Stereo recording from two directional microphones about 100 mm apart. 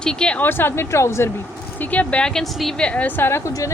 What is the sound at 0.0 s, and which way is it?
Speech, 10° left (ahead or behind).